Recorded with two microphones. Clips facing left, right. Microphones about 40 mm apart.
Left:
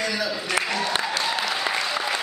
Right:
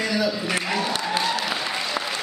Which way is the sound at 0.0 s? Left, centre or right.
Centre.